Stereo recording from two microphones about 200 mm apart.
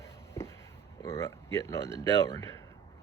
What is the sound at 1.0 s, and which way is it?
Speech, 15° left (ahead or behind).